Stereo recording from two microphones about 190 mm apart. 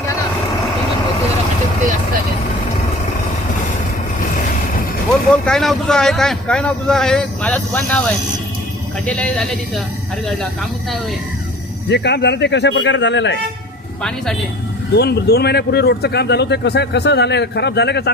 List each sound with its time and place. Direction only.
5.5 s speech: 5° left (ahead or behind)
11.9 s speech: 65° left (ahead or behind)
14.9 s speech: 60° left (ahead or behind)